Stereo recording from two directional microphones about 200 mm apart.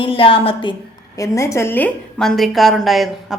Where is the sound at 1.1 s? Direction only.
15° left (ahead or behind); by 3.3 s centre (ahead or behind).